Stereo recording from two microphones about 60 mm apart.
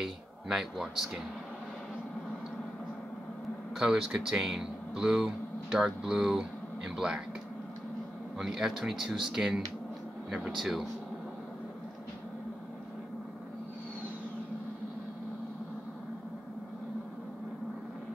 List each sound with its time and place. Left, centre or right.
0.0 s speech: centre
3.7 s speech: centre
8.4 s speech: centre